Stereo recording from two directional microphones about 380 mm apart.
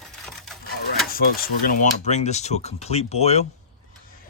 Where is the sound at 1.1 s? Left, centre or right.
Left.